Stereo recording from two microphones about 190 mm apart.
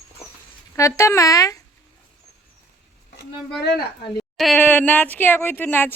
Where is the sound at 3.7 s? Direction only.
60° left (ahead or behind).